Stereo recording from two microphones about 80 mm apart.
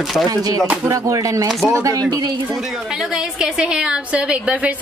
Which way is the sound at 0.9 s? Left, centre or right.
Right.